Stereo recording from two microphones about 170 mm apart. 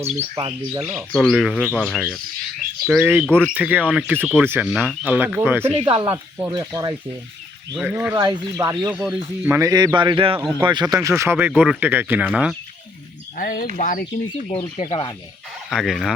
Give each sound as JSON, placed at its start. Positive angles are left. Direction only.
{"t": 0.0, "sound": "speech", "side_deg": -40}
{"t": 0.7, "sound": "speech", "side_deg": -10}
{"t": 1.1, "sound": "speech", "side_deg": 0}
{"t": 3.2, "sound": "speech", "side_deg": 5}
{"t": 3.5, "sound": "speech", "side_deg": -10}
{"t": 5.7, "sound": "speech", "side_deg": -30}
{"t": 7.8, "sound": "speech", "side_deg": -10}
{"t": 8.1, "sound": "speech", "side_deg": -20}
{"t": 8.9, "sound": "speech", "side_deg": -10}
{"t": 13.3, "sound": "speech", "side_deg": 55}
{"t": 14.8, "sound": "speech", "side_deg": 30}
{"t": 15.7, "sound": "speech", "side_deg": 0}